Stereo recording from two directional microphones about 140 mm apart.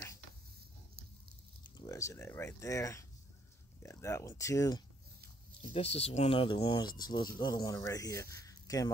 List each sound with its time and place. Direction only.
1.8 s speech: 25° left (ahead or behind)
5.7 s speech: 45° left (ahead or behind); by 8.4 s 20° left (ahead or behind)
8.5 s a sound: 25° left (ahead or behind)